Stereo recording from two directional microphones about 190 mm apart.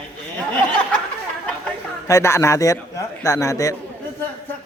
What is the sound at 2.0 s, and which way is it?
A man's voice, 15° left (ahead or behind).